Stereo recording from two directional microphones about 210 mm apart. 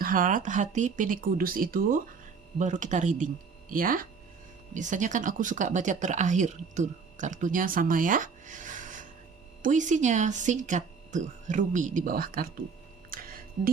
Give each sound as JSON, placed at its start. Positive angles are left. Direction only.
{"t": 0.0, "sound": "speech", "side_deg": -40}
{"t": 13.1, "sound": "music", "side_deg": -45}